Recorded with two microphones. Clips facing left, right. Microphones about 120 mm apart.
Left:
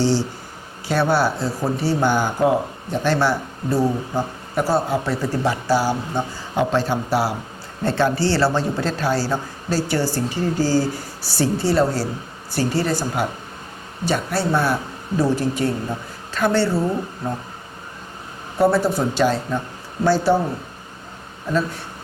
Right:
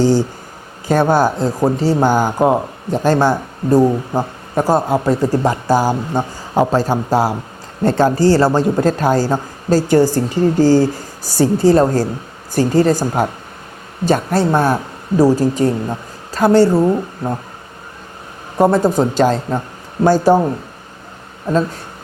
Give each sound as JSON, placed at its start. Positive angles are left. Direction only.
{"t": 0.0, "sound": "speech", "side_deg": -45}
{"t": 18.5, "sound": "speech", "side_deg": -45}